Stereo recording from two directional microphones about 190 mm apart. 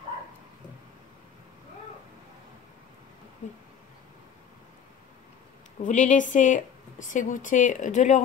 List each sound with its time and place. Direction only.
5.9 s speech: 40° left (ahead or behind)